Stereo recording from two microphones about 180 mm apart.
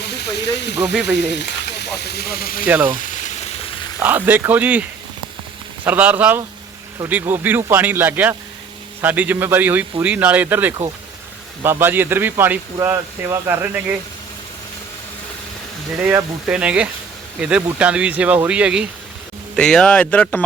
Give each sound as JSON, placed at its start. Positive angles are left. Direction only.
{"t": 0.0, "sound": "speech", "side_deg": 70}
{"t": 2.6, "sound": "speech", "side_deg": -10}
{"t": 3.0, "sound": "sizzle", "side_deg": 45}
{"t": 4.0, "sound": "speech", "side_deg": -10}
{"t": 16.0, "sound": "speech", "side_deg": -5}